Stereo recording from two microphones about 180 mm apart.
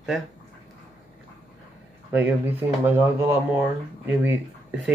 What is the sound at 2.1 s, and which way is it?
Speech, 10° right (ahead or behind).